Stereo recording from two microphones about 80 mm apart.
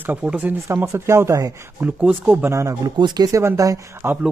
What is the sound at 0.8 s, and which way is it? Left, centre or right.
Speech, right.